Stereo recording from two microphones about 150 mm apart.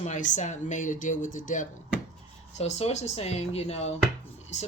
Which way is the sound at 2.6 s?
45° left (ahead or behind).